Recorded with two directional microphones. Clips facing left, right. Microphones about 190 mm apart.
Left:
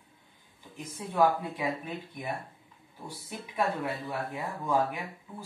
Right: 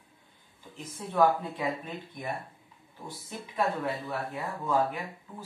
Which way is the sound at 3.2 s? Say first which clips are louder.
Even; 10° left (ahead or behind).